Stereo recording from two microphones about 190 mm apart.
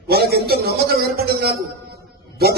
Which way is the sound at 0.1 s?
55° right (ahead or behind).